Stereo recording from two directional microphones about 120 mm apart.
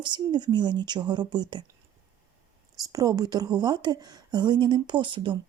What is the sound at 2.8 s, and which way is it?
Speech, 30° right (ahead or behind).